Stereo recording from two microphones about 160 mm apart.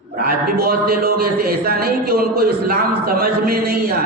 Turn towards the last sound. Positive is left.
turn(degrees=-70)  # may be behind; listen again after turning